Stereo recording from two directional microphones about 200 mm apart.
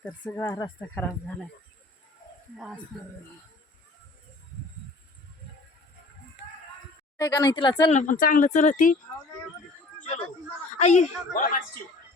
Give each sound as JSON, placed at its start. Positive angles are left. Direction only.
{"t": 0.1, "sound": "speech", "side_deg": 15}
{"t": 2.9, "sound": "speech", "side_deg": 0}
{"t": 7.2, "sound": "speech", "side_deg": 20}
{"t": 7.9, "sound": "speech", "side_deg": 40}
{"t": 10.8, "sound": "speech", "side_deg": 35}